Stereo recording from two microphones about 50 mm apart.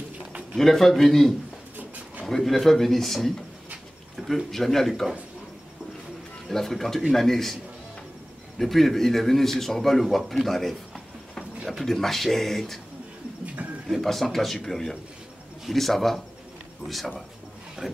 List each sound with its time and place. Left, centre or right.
0.6 s a man's voice: centre
1.8 s a sound: right
2.2 s a man's voice: centre
4.5 s a man's voice: centre
6.5 s a man's voice: centre
8.5 s a man's voice: centre
13.8 s a man's voice: centre
17.8 s speech: centre